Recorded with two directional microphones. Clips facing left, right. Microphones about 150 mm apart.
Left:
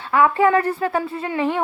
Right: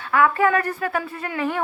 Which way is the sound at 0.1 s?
25° left (ahead or behind).